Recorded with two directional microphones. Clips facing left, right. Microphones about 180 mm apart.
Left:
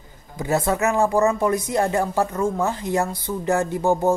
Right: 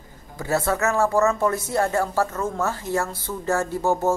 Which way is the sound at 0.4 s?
15° left (ahead or behind).